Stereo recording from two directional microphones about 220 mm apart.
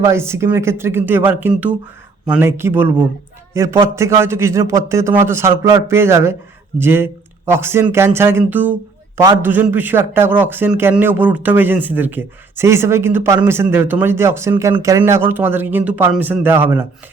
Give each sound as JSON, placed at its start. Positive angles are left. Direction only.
{"t": 0.0, "sound": "a man's voice", "side_deg": -10}